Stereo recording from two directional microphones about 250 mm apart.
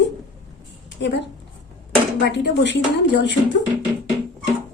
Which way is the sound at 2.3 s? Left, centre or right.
Left.